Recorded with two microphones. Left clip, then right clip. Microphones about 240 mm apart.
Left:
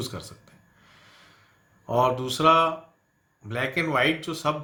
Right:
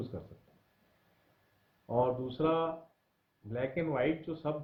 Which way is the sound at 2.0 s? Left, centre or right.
Centre.